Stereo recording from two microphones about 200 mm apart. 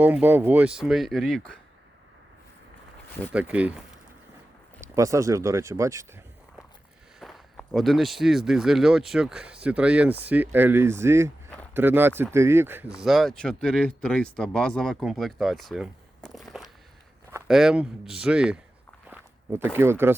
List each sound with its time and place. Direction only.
0.0 s speech: 10° right (ahead or behind)
3.3 s speech: 5° right (ahead or behind)
7.2 s speech: centre (ahead or behind)